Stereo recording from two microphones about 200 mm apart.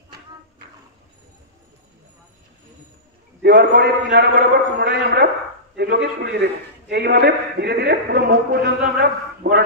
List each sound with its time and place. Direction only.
3.4 s a man's voice: 55° right (ahead or behind)